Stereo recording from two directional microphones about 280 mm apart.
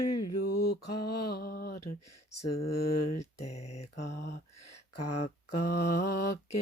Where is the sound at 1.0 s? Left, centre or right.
Left.